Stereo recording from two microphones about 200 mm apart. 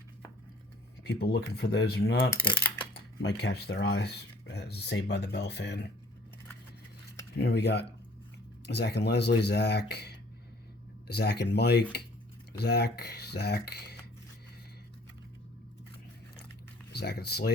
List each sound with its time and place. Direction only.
1.0 s speech: 55° left (ahead or behind)
7.3 s speech: 55° left (ahead or behind)
16.9 s speech: 55° left (ahead or behind)